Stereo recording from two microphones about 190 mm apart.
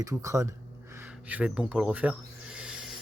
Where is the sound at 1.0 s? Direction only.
10° right (ahead or behind).